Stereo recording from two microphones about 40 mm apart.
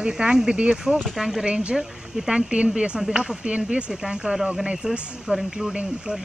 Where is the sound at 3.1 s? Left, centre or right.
Right.